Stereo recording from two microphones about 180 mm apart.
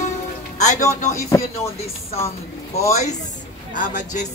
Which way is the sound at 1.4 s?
35° left (ahead or behind).